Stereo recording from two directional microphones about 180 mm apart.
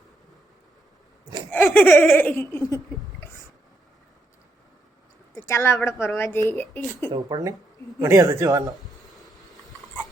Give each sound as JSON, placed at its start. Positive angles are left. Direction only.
{"t": 1.5, "sound": "giggle", "side_deg": 10}
{"t": 5.3, "sound": "speech", "side_deg": 15}
{"t": 7.1, "sound": "speech", "side_deg": -25}